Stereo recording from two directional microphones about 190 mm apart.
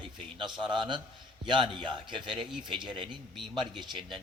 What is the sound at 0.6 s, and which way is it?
A man's voice, 25° right (ahead or behind).